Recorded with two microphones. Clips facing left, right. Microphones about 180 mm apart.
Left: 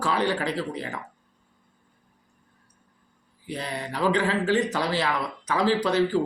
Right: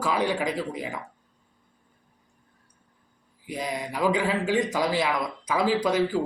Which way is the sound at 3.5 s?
10° right (ahead or behind).